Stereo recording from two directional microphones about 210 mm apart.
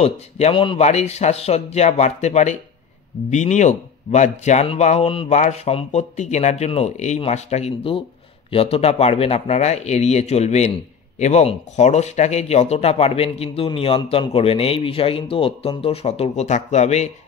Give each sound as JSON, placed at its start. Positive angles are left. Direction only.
{"t": 0.0, "sound": "speech", "side_deg": 25}